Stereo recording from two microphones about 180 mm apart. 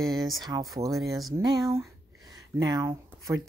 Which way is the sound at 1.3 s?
20° right (ahead or behind).